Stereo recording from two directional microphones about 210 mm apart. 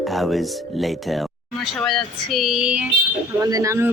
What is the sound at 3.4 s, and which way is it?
Speech, 15° right (ahead or behind).